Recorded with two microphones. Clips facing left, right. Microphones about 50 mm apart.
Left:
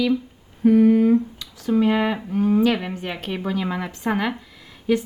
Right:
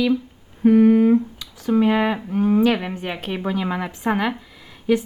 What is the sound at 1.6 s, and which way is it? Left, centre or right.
Speech, centre.